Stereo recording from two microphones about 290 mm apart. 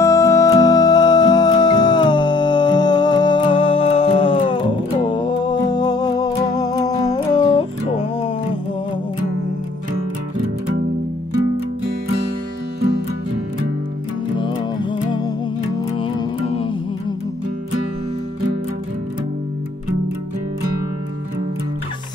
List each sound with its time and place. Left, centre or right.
0.0 s music: centre
14.3 s music: centre